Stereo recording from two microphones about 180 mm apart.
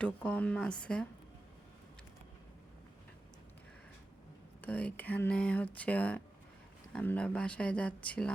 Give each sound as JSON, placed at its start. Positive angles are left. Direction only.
{"t": 0.0, "sound": "speech", "side_deg": 5}
{"t": 4.6, "sound": "speech", "side_deg": 10}